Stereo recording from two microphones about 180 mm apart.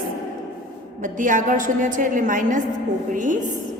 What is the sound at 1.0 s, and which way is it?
A woman's voice, 45° right (ahead or behind).